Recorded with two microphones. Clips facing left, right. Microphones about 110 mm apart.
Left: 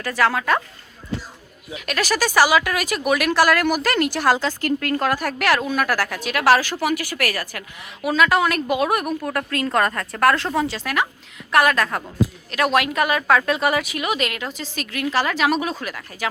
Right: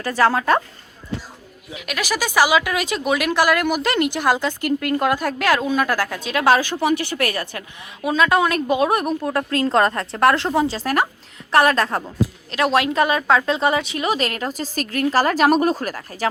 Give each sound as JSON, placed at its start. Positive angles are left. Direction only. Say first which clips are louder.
{"t": 0.0, "sound": "a woman's voice", "louder": "right 2 dB", "side_deg": -30}
{"t": 1.7, "sound": "a woman's voice", "louder": "left 2 dB", "side_deg": -15}